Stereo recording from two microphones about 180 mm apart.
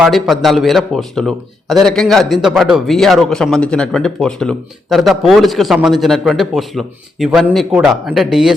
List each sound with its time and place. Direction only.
0.0 s a man's voice: centre (ahead or behind)